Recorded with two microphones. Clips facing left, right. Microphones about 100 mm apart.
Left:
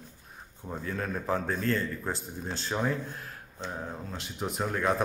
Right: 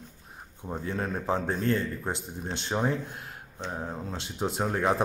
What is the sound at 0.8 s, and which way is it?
A man's voice, 25° right (ahead or behind).